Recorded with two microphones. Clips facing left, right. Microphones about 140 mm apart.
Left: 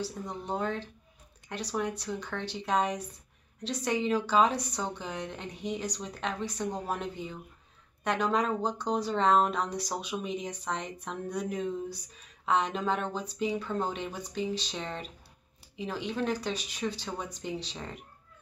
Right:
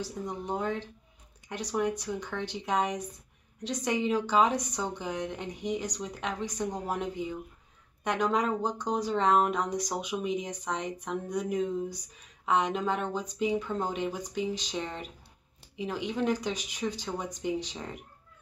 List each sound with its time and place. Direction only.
0.0 s speech: 15° right (ahead or behind)